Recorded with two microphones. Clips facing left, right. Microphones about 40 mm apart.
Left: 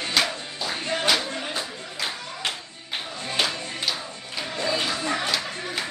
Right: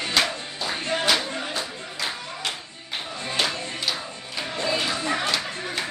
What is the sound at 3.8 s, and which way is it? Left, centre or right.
Music, centre.